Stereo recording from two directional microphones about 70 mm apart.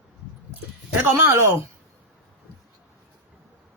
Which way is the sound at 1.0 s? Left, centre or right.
Right.